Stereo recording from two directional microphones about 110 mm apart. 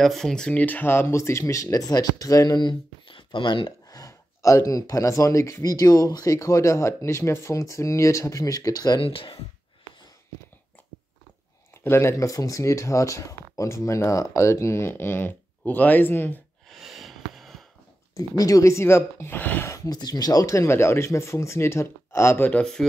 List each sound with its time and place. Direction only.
0.0 s speech: 5° left (ahead or behind); by 2.7 s 35° left (ahead or behind)
3.1 s a sound: 50° left (ahead or behind)
3.9 s speech: 30° left (ahead or behind)
9.0 s speech: 50° left (ahead or behind)
11.7 s speech: 20° left (ahead or behind)
16.6 s snort: centre (ahead or behind)
18.1 s speech: 35° left (ahead or behind)
19.7 s speech: 35° left (ahead or behind)
22.5 s speech: 5° left (ahead or behind)